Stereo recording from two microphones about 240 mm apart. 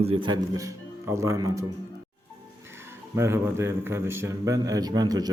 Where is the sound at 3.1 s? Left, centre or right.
Centre.